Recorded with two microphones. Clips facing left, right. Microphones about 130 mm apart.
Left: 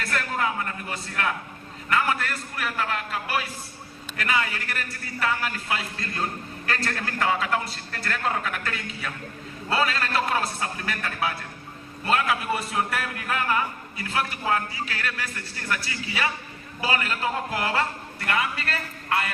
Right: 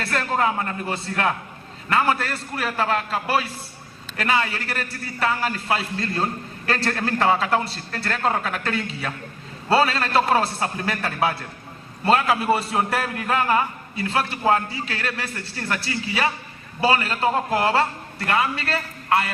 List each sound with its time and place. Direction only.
0.0 s a man's voice: 35° right (ahead or behind)